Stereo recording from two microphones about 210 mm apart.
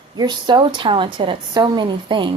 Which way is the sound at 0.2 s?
20° right (ahead or behind).